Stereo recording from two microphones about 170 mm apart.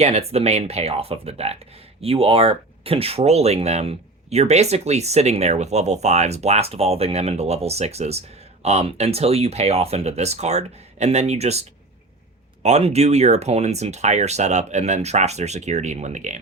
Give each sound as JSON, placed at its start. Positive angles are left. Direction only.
{"t": 0.0, "sound": "speech", "side_deg": -35}
{"t": 12.6, "sound": "speech", "side_deg": -40}